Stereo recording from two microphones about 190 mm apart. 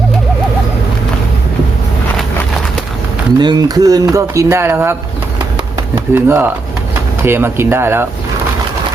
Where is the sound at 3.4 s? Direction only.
20° right (ahead or behind).